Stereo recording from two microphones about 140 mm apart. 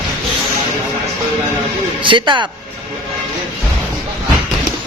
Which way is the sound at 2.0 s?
35° right (ahead or behind).